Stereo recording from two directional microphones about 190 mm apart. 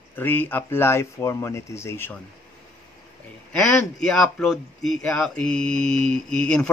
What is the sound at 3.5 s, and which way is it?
Speech, 5° left (ahead or behind).